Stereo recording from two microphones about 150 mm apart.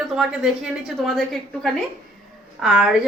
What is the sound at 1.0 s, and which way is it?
A woman's voice, centre (ahead or behind).